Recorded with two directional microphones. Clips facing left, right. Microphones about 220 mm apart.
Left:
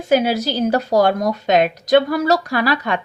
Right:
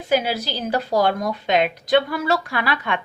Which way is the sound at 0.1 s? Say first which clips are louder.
Left 5 dB; 45° left (ahead or behind).